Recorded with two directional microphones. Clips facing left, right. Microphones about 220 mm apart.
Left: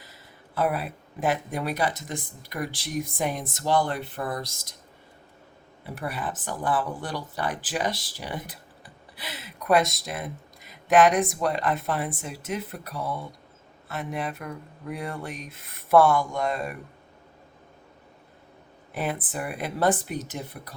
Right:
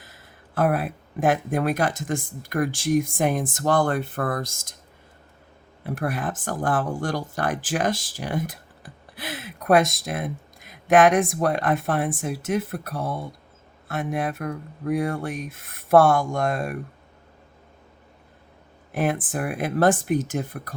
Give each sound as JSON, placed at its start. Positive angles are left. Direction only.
{"t": 0.0, "sound": "speech", "side_deg": -50}
{"t": 5.8, "sound": "speech", "side_deg": -50}
{"t": 15.3, "sound": "speech", "side_deg": -50}
{"t": 18.9, "sound": "speech", "side_deg": -45}